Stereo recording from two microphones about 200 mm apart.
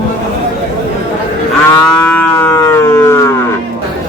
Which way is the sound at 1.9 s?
5° left (ahead or behind).